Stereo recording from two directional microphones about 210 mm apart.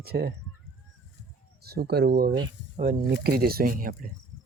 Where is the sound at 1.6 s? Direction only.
50° right (ahead or behind).